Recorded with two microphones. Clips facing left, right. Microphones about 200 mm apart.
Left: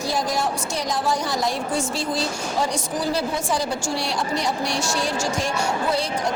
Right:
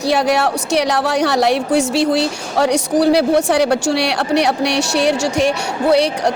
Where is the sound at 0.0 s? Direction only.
70° right (ahead or behind).